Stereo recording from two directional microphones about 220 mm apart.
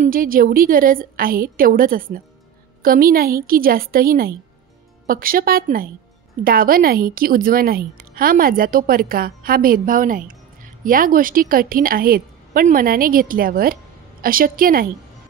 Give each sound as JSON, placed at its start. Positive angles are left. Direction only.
{"t": 0.0, "sound": "a woman's voice", "side_deg": -40}